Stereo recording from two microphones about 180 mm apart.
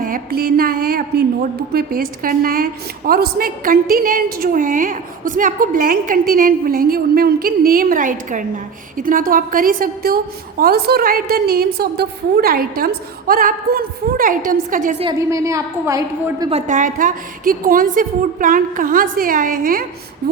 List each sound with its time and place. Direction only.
0.0 s a woman's voice: 50° right (ahead or behind)
15.0 s a woman's voice: 20° right (ahead or behind)
16.5 s a woman's voice: 40° right (ahead or behind)